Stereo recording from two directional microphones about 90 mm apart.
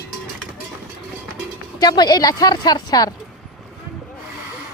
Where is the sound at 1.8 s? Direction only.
50° left (ahead or behind).